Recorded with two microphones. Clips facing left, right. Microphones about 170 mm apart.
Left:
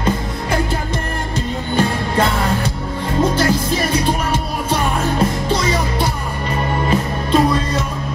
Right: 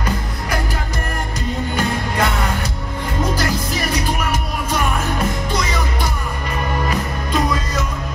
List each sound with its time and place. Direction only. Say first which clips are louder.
1.8 s music: left 5 dB; 30° left (ahead or behind)